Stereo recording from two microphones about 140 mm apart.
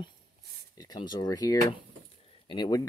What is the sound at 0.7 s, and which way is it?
Speech, 30° left (ahead or behind).